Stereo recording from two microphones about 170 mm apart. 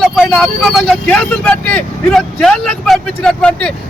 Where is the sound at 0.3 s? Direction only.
5° left (ahead or behind).